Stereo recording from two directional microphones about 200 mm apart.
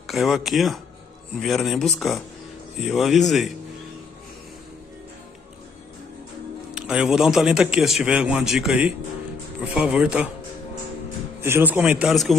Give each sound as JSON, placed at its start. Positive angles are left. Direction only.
{"t": 0.0, "sound": "a man's voice", "side_deg": 0}
{"t": 6.7, "sound": "a man's voice", "side_deg": -5}
{"t": 11.4, "sound": "a man's voice", "side_deg": -10}